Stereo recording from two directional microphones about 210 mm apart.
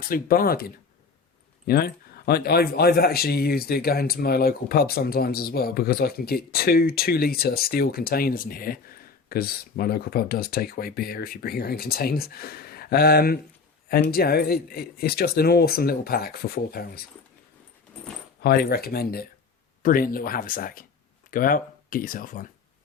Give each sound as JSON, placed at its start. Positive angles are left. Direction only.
{"t": 0.0, "sound": "speech", "side_deg": 45}
{"t": 18.4, "sound": "speech", "side_deg": 45}